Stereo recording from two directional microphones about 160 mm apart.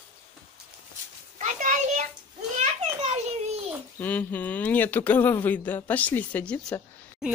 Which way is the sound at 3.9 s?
10° left (ahead or behind).